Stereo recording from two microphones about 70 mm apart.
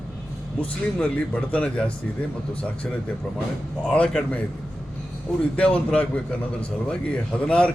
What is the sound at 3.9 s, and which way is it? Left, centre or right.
Speech, centre.